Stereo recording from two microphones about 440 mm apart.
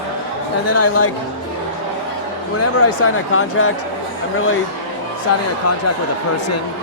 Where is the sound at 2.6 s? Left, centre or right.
Left.